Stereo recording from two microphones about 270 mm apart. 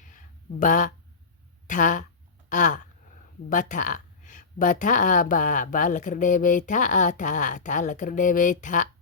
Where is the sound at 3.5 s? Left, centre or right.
Left.